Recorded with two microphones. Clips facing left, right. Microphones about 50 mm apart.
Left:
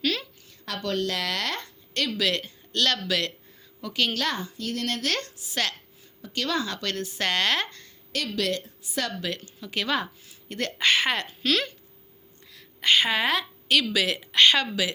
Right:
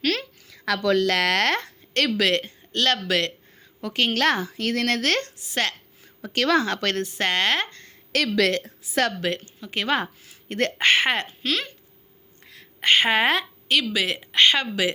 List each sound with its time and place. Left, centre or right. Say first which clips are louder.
0.0 s a sound: right 3 dB; right
1.0 s a woman's voice: right 8 dB; right
4.1 s a woman's voice: right 7 dB; right
5.1 s speech: right 4 dB; right
6.2 s speech: right 7 dB; right
7.2 s a woman's voice: right 1 dB; right
8.1 s a woman's voice: right 6 dB; right
9.3 s a woman's voice: right 3 dB; right
10.2 s a woman's voice: right 6 dB; right
12.5 s a sound: right 2 dB; right
13.9 s speech: right 1 dB; right